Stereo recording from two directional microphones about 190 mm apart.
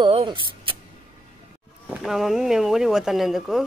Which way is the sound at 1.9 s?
Centre (ahead or behind).